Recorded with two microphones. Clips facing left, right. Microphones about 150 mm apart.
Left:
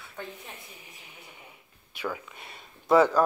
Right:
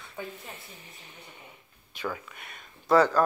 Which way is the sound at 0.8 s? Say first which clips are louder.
Right 1 dB; 10° left (ahead or behind).